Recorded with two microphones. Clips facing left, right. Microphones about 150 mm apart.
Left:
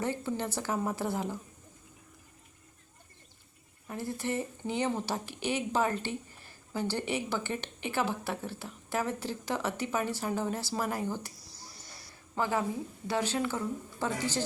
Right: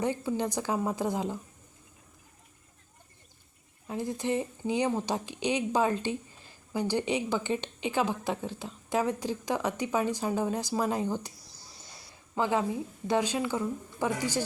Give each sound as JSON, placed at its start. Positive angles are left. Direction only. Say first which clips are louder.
{"t": 0.0, "sound": "speech", "louder": "right 3 dB", "side_deg": -15}
{"t": 3.8, "sound": "speech", "louder": "right 4 dB", "side_deg": -15}
{"t": 12.4, "sound": "speech", "louder": "right 3 dB", "side_deg": -15}